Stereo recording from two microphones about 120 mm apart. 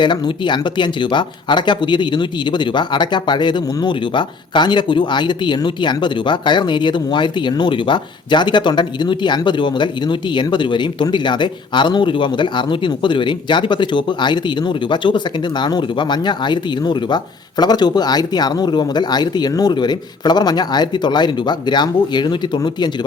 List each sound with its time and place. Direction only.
0.0 s speech: 40° left (ahead or behind)